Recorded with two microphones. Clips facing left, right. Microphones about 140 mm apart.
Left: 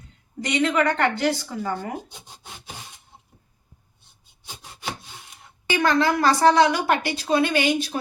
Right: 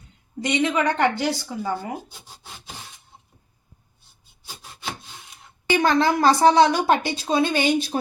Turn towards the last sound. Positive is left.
turn(degrees=-30)  # may be behind; listen again after turning